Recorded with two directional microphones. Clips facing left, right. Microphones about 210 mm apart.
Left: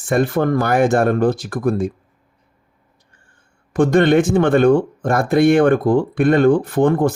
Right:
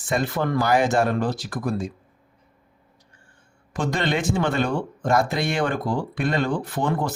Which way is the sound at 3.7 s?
55° left (ahead or behind).